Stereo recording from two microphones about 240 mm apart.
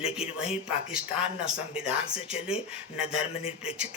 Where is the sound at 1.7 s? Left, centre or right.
Centre.